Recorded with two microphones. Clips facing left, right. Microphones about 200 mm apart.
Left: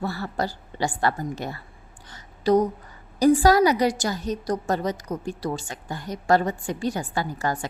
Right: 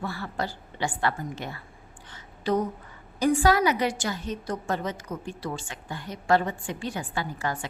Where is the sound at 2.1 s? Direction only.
40° left (ahead or behind).